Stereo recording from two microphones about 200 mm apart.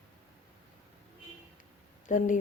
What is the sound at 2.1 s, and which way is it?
Speech, 40° left (ahead or behind).